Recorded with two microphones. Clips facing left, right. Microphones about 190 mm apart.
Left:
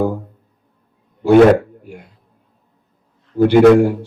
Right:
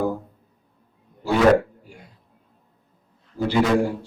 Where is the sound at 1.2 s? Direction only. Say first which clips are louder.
Left 8 dB; 60° left (ahead or behind).